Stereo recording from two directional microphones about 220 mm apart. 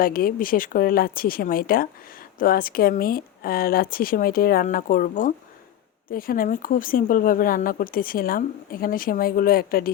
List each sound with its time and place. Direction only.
0.0 s speech: 40° left (ahead or behind)